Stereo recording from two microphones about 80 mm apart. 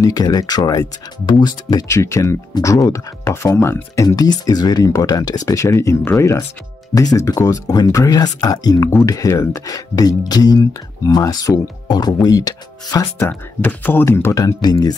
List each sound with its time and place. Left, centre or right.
0.0 s speech: left
1.9 s speech: left
6.9 s speech: left
13.3 s speech: left
14.3 s speech: left